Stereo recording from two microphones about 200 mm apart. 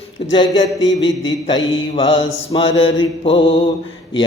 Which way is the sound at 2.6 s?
70° left (ahead or behind).